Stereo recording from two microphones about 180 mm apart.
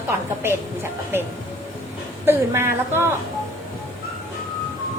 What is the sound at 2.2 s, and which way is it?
Speech, 15° right (ahead or behind).